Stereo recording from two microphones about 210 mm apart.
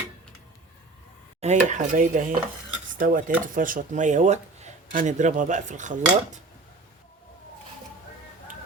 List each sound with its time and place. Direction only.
1.4 s speech: 35° right (ahead or behind)